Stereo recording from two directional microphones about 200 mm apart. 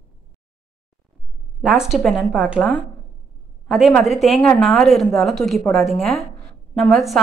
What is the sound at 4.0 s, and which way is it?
Speech, centre (ahead or behind).